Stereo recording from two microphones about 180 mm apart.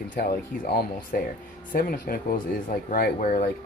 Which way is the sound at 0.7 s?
60° left (ahead or behind).